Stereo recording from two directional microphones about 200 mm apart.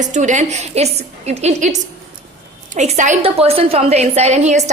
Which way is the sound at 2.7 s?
35° right (ahead or behind).